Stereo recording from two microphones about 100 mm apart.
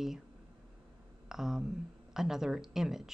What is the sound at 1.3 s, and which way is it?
Speech, 5° right (ahead or behind).